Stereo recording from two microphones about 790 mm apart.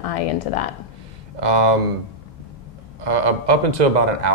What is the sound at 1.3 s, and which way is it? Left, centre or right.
Speech, right.